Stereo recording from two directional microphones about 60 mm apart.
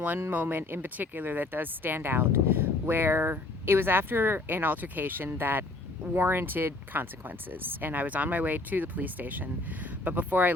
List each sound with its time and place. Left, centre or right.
0.3 s speech: right